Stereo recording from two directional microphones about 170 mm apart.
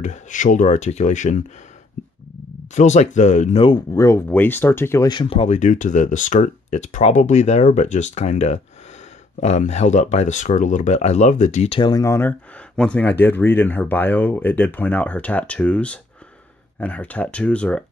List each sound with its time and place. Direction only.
0.0 s speech: 45° left (ahead or behind)
2.7 s speech: 45° left (ahead or behind)
3.6 s speech: 25° left (ahead or behind)
5.1 s speech: 30° left (ahead or behind)
11.8 s speech: 20° left (ahead or behind)